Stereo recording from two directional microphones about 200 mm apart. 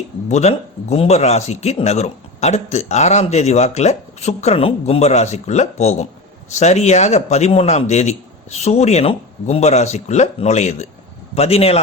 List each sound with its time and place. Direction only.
0.3 s speech: 35° left (ahead or behind)